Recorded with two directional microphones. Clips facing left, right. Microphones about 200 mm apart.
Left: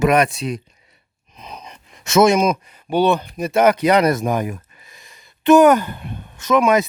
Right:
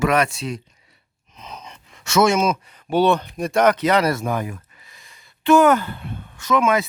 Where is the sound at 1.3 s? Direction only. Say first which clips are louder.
Left 1 dB; 10° left (ahead or behind).